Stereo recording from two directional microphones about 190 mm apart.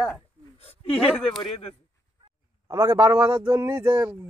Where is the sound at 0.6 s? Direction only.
30° left (ahead or behind).